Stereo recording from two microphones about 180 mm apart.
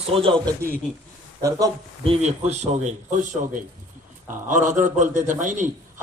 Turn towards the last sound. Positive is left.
turn(degrees=-45)  # may be behind; listen again after turning